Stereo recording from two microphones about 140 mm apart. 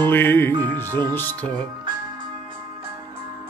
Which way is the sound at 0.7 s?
15° left (ahead or behind).